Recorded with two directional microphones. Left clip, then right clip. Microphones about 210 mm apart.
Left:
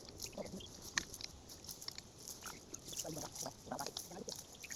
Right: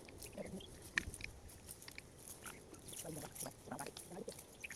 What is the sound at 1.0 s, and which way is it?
Biting, 10° left (ahead or behind).